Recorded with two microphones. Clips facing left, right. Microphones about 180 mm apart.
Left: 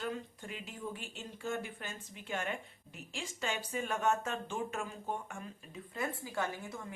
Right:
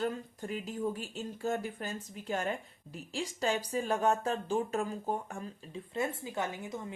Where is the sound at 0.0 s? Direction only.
40° right (ahead or behind).